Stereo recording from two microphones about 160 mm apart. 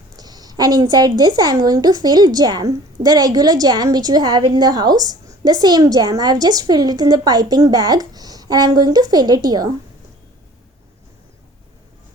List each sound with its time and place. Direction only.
0.2 s a woman's voice: 25° right (ahead or behind)